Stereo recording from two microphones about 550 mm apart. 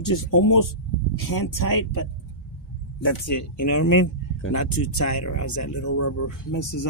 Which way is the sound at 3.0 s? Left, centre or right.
Left.